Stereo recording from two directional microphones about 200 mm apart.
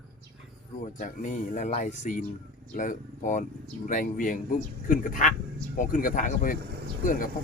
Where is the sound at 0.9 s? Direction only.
40° left (ahead or behind).